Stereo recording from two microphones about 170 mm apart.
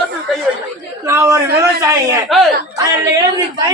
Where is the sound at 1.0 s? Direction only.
15° right (ahead or behind).